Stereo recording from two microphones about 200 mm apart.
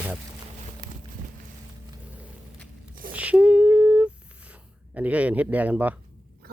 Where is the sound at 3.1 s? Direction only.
5° right (ahead or behind).